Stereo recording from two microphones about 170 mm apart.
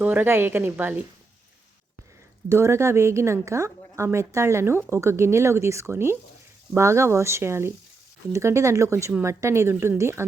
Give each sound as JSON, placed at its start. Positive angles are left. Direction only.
{"t": 0.0, "sound": "a woman's voice", "side_deg": -10}
{"t": 2.5, "sound": "a woman's voice", "side_deg": -15}